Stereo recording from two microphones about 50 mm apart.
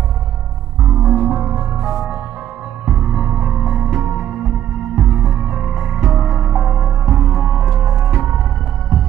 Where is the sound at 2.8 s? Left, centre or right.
Centre.